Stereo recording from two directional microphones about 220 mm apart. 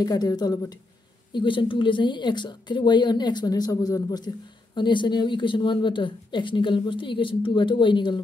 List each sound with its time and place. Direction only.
0.0 s a woman's voice: 15° left (ahead or behind)